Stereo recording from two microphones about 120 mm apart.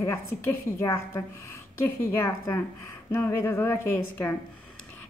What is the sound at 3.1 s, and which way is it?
A woman's voice, 20° left (ahead or behind).